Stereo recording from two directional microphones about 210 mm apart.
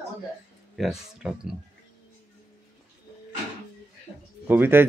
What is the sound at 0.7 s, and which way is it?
Speech, centre (ahead or behind).